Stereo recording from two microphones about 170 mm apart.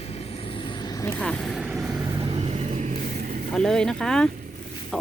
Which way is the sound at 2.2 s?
35° right (ahead or behind).